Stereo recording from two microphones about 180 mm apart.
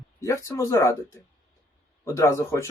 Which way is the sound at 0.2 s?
15° left (ahead or behind).